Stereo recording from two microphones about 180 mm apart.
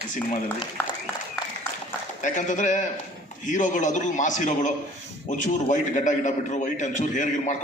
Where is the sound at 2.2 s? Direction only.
45° left (ahead or behind).